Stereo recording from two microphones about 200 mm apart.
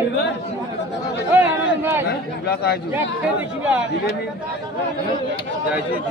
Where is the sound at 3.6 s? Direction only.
5° right (ahead or behind).